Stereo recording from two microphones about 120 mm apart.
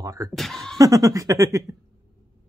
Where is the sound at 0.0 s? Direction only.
30° right (ahead or behind).